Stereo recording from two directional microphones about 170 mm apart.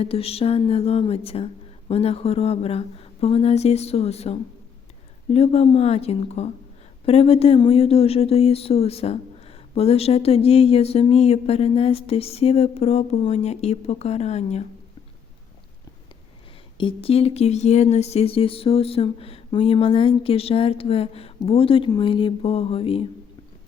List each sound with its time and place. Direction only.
0.0 s speech: 35° left (ahead or behind)
16.7 s speech: 30° left (ahead or behind)